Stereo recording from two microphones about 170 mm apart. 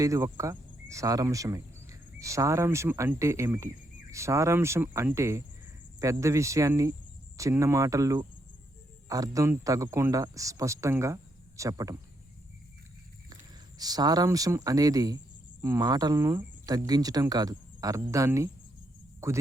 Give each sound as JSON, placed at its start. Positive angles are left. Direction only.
{"t": 0.0, "sound": "speech", "side_deg": -15}
{"t": 13.7, "sound": "speech", "side_deg": -20}